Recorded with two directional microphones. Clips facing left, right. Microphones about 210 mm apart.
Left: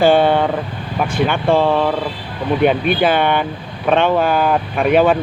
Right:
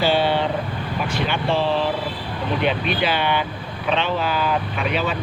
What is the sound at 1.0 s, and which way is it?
Speech, 50° left (ahead or behind).